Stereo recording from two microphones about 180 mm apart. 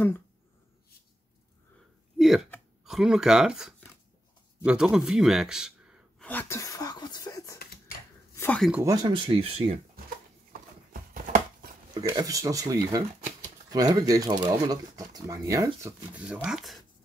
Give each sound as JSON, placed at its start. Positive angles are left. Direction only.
{"t": 2.1, "sound": "a sound", "side_deg": 0}
{"t": 2.8, "sound": "speech", "side_deg": -5}
{"t": 6.2, "sound": "speech", "side_deg": 15}
{"t": 8.4, "sound": "speech", "side_deg": 5}
{"t": 8.8, "sound": "speech", "side_deg": -20}
{"t": 10.5, "sound": "a sound", "side_deg": -50}
{"t": 11.9, "sound": "speech", "side_deg": -20}